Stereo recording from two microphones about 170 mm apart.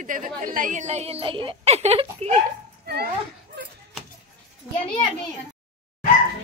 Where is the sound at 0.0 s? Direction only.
50° right (ahead or behind).